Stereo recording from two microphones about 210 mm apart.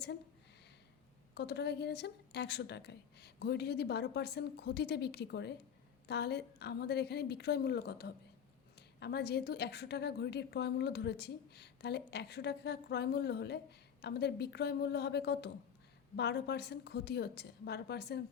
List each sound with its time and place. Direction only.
1.4 s a woman's voice: 50° left (ahead or behind)